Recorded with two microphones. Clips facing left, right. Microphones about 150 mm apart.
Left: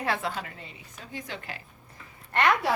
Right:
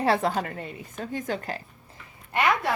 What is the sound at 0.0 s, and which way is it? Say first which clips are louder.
A woman's voice: right 7 dB; 40° right (ahead or behind).